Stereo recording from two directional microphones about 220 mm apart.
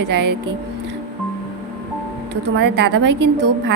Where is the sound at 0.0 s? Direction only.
50° right (ahead or behind).